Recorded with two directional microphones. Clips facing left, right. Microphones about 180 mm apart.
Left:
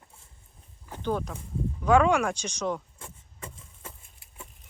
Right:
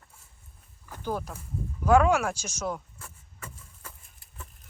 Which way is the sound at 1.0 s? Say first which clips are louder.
Left 3 dB; 5° right (ahead or behind).